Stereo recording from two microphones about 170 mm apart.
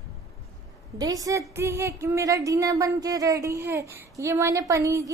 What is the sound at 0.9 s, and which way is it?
Speech, 20° right (ahead or behind).